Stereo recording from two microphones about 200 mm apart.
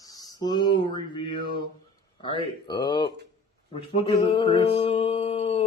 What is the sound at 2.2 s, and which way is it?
Speech, 20° left (ahead or behind).